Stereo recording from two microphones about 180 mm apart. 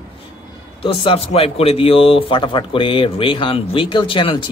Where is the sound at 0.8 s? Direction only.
30° left (ahead or behind).